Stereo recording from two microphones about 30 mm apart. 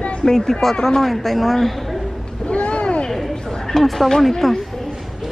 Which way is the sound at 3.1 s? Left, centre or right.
Centre.